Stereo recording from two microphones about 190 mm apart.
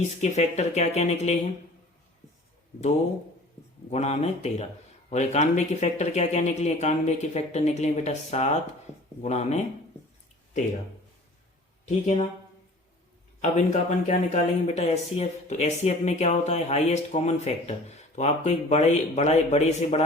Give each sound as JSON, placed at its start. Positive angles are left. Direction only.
{"t": 0.2, "sound": "speech", "side_deg": 35}
{"t": 3.8, "sound": "speech", "side_deg": 35}
{"t": 11.9, "sound": "speech", "side_deg": 35}
{"t": 13.4, "sound": "speech", "side_deg": 35}